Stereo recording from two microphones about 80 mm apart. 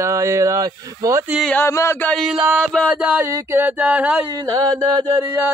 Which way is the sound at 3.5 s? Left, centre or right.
Right.